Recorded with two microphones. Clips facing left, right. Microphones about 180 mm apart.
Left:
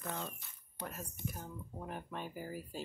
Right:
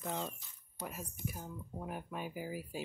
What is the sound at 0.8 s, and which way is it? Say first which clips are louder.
Speech: right 1 dB; 5° right (ahead or behind).